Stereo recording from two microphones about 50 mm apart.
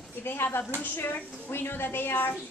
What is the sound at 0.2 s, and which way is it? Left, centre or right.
A woman's voice, left.